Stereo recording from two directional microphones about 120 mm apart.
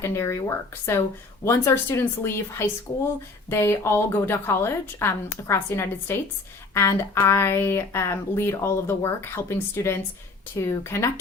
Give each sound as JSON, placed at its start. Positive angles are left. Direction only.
{"t": 0.0, "sound": "speech", "side_deg": 25}